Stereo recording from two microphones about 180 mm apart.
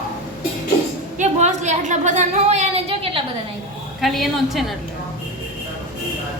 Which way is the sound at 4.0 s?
Centre (ahead or behind).